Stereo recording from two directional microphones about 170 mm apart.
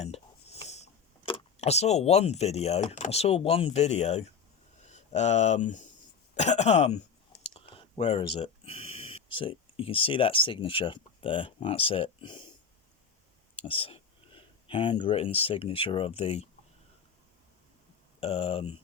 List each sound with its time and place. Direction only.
0.0 s speech: 40° left (ahead or behind)
13.6 s speech: 35° left (ahead or behind)
18.2 s speech: 35° left (ahead or behind)